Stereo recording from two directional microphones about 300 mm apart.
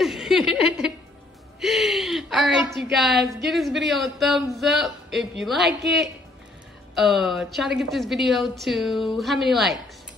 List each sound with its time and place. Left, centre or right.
0.0 s a sound: centre
1.6 s a woman's voice: centre
7.0 s a woman's voice: centre